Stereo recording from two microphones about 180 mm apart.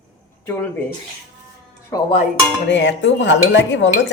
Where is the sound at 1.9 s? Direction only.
30° left (ahead or behind).